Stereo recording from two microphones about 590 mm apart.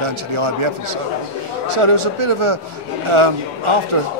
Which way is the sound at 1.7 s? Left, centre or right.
Right.